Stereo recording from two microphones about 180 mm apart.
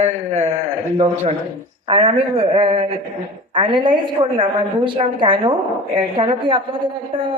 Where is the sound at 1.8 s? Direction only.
30° right (ahead or behind).